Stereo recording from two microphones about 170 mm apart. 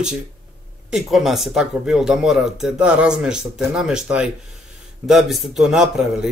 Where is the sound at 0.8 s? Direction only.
Centre (ahead or behind).